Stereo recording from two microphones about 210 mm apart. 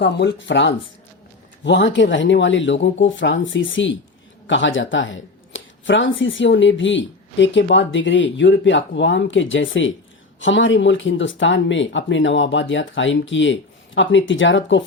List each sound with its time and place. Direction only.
0.0 s speech: 55° left (ahead or behind)